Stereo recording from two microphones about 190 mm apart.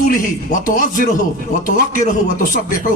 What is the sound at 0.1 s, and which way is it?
A man's voice, 45° left (ahead or behind).